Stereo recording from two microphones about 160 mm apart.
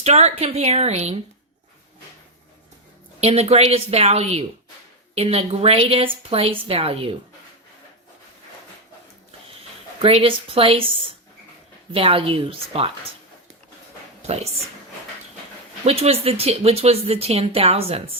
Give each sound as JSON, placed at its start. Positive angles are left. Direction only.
{"t": 0.0, "sound": "a woman's voice", "side_deg": -45}
{"t": 3.2, "sound": "speech", "side_deg": -40}
{"t": 10.0, "sound": "speech", "side_deg": -35}
{"t": 14.2, "sound": "speech", "side_deg": -40}
{"t": 15.8, "sound": "speech", "side_deg": -40}